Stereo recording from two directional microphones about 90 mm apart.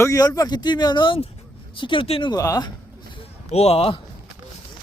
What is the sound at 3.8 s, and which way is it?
Speech, 90° left.